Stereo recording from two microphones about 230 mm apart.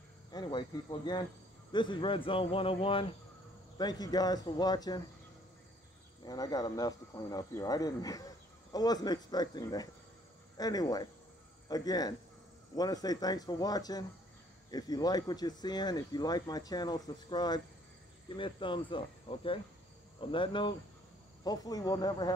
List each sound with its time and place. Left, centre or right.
0.3 s speech: centre
6.2 s speech: centre